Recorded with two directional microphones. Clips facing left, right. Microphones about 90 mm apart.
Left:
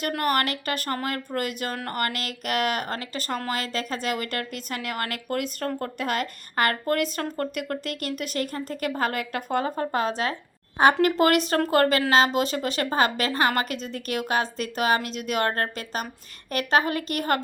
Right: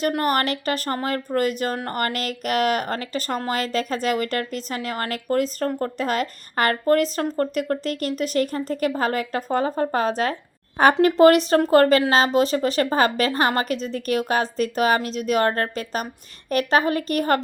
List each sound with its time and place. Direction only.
0.1 s speech: 35° right (ahead or behind)